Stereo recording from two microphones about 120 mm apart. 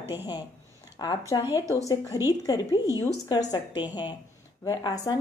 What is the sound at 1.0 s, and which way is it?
Speech, 35° left (ahead or behind).